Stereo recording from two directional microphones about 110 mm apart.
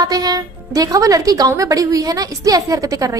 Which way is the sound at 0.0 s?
35° right (ahead or behind).